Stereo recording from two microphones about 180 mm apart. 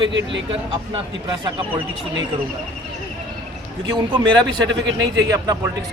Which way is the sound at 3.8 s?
25° right (ahead or behind).